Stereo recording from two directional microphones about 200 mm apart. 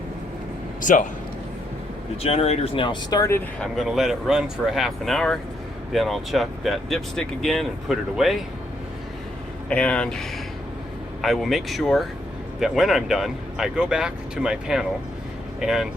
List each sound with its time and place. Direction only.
0.9 s speech: 40° left (ahead or behind)
2.2 s speech: 30° left (ahead or behind); by 3.7 s 15° left (ahead or behind)
3.8 s speech: centre (ahead or behind)
9.6 s speech: 5° left (ahead or behind)